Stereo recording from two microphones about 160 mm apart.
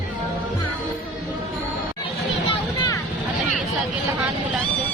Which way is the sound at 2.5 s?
25° left (ahead or behind).